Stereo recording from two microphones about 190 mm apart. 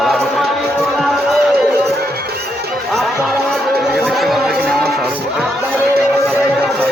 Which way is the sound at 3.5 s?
Centre (ahead or behind).